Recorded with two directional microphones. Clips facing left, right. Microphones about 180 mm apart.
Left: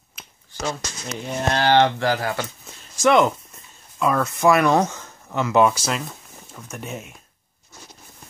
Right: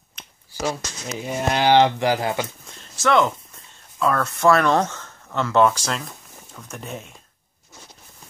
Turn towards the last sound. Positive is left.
turn(degrees=5)  # may be behind; listen again after turning